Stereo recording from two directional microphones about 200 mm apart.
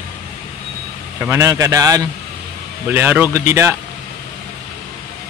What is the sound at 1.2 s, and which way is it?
Speech, 15° right (ahead or behind).